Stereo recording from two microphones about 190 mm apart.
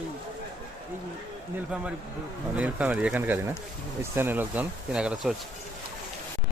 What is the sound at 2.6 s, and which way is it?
Speech, 5° right (ahead or behind).